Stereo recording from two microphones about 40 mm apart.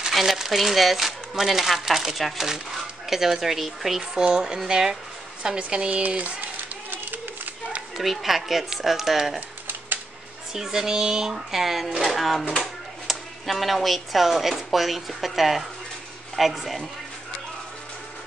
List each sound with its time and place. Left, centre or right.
0.1 s speech: centre
4.2 s speech: right
5.6 s speech: right
6.0 s a sound: right
8.0 s speech: centre
10.5 s speech: centre